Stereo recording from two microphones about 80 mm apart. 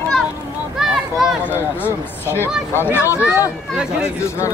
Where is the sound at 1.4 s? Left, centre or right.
Left.